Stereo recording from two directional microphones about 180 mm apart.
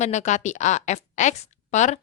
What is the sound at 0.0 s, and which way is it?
A woman's voice, 40° left (ahead or behind).